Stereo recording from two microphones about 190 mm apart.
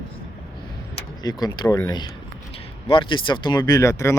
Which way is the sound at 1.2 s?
20° left (ahead or behind).